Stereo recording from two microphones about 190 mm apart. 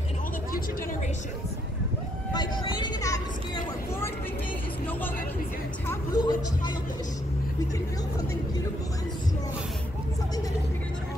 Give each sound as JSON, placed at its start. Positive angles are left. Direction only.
{"t": 2.3, "sound": "vehicle", "side_deg": 25}
{"t": 5.9, "sound": "vehicle", "side_deg": 20}